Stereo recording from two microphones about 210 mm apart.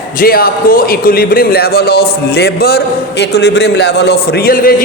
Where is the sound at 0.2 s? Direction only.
45° left (ahead or behind).